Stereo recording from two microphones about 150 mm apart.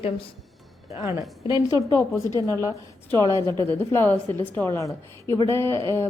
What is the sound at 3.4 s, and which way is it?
Speech, 30° right (ahead or behind).